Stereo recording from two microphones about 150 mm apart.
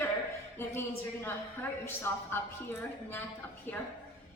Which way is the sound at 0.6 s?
15° left (ahead or behind).